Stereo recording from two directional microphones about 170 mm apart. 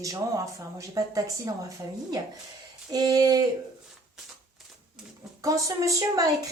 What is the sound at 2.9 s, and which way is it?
Speech, 25° right (ahead or behind).